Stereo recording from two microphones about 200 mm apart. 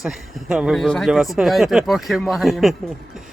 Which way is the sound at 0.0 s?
5° right (ahead or behind).